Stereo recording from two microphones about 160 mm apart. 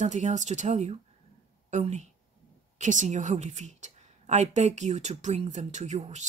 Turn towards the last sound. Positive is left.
turn(degrees=-45)  # may be behind; listen again after turning